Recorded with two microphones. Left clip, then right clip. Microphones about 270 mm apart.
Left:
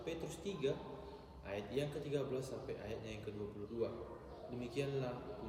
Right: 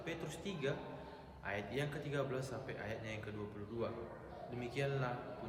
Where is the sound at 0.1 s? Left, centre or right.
Centre.